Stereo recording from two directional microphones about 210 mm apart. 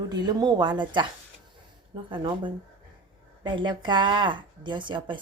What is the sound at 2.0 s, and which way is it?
A woman's voice, 20° right (ahead or behind).